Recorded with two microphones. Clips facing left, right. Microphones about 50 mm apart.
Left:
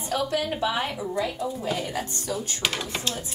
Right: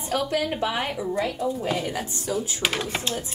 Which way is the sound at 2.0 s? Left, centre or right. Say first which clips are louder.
Right 2 dB; centre.